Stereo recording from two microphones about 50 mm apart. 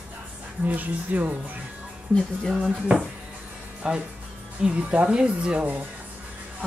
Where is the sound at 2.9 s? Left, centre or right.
Right.